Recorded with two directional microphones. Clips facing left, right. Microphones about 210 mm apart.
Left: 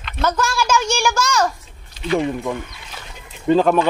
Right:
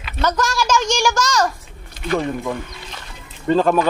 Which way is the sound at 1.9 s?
50° right (ahead or behind).